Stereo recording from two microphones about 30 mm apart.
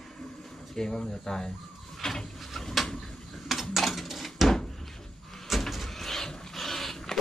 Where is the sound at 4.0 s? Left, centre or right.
Centre.